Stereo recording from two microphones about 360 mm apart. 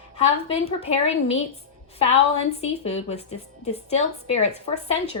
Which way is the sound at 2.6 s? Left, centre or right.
Centre.